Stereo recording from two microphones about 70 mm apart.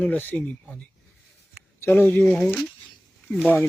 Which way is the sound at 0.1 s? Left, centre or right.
Left.